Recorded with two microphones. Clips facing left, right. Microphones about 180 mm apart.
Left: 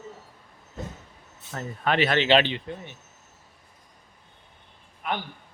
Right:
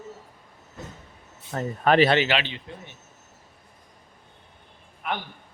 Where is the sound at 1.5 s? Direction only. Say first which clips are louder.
Right 6 dB; 40° right (ahead or behind).